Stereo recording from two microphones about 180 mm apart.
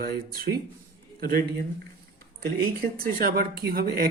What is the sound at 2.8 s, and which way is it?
Speech, 55° right (ahead or behind).